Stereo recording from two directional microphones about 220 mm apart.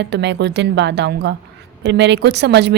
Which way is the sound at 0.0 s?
50° right (ahead or behind).